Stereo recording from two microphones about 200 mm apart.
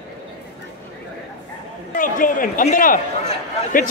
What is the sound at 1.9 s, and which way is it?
Speech, 40° left (ahead or behind).